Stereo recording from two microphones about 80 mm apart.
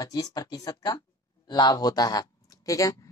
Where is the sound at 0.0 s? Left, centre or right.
Left.